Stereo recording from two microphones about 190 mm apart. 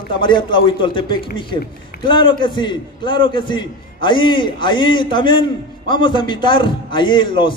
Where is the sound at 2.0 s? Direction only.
25° left (ahead or behind).